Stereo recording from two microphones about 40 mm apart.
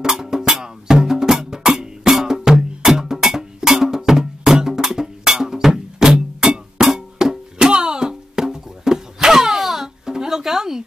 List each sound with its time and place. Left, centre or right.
0.0 s music: centre